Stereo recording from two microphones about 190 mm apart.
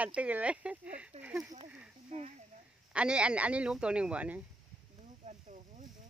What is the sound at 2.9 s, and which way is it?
Speech, 5° right (ahead or behind).